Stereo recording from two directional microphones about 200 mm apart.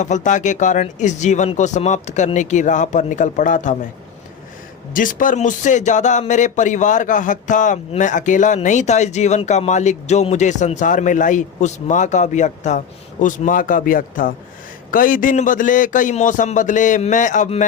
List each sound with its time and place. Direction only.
0.0 s a man's voice: 40° left (ahead or behind)
4.9 s a man's voice: 40° left (ahead or behind)